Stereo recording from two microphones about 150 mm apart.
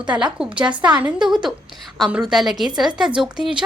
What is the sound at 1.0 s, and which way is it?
A woman's voice, 5° right (ahead or behind).